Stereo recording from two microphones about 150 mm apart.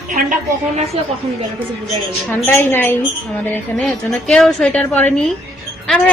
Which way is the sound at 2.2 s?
15° left (ahead or behind).